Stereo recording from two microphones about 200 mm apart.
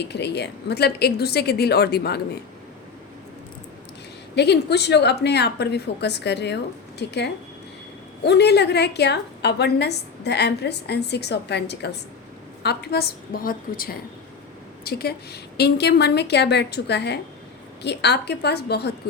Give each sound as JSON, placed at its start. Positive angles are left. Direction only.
{"t": 0.0, "sound": "a woman's voice", "side_deg": 55}
{"t": 4.4, "sound": "a woman's voice", "side_deg": 55}
{"t": 8.2, "sound": "a woman's voice", "side_deg": 55}